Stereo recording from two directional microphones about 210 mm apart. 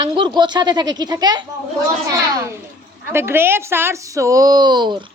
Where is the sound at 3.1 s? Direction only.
10° right (ahead or behind).